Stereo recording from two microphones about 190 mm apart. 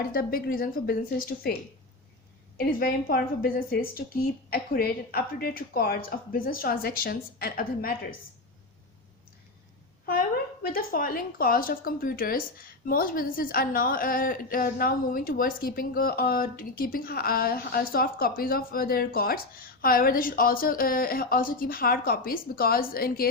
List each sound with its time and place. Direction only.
0.1 s a woman's voice: 50° left (ahead or behind)
2.6 s a woman's voice: 50° left (ahead or behind)
10.1 s a woman's voice: 50° left (ahead or behind)